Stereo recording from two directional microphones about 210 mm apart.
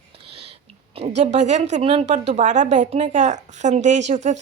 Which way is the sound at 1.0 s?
35° right (ahead or behind).